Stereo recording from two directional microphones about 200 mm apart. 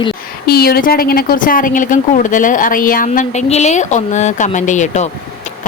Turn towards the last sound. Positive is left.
turn(degrees=35)  # may be behind; listen again after turning